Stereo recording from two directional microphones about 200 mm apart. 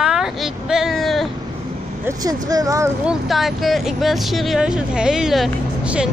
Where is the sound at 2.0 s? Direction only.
15° right (ahead or behind).